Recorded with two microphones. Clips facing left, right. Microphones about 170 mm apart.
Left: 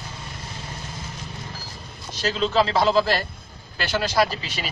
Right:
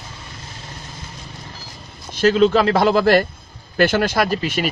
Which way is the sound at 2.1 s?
55° right (ahead or behind).